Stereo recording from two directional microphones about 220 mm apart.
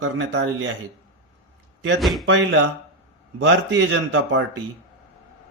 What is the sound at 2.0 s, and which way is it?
Speech, centre (ahead or behind).